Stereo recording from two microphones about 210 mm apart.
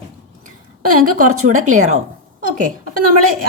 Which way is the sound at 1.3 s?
90° right.